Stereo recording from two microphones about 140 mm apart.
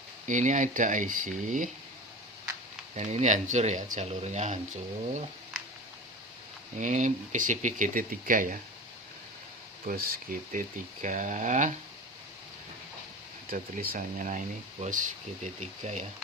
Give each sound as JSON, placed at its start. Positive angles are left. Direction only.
{"t": 0.3, "sound": "speech", "side_deg": -60}
{"t": 2.9, "sound": "speech", "side_deg": -55}
{"t": 6.7, "sound": "speech", "side_deg": -65}
{"t": 9.8, "sound": "speech", "side_deg": -90}
{"t": 11.0, "sound": "speech", "side_deg": -65}
{"t": 13.5, "sound": "speech", "side_deg": -90}